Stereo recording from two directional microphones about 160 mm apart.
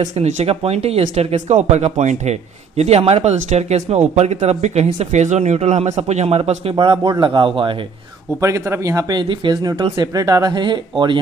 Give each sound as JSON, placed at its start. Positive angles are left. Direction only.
{"t": 0.1, "sound": "speech", "side_deg": -40}
{"t": 8.4, "sound": "speech", "side_deg": -20}